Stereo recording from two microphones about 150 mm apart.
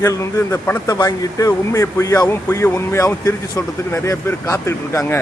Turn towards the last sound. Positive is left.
turn(degrees=20)  # may be behind; listen again after turning